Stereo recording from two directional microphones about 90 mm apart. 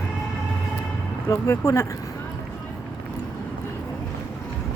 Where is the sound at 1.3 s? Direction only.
30° left (ahead or behind).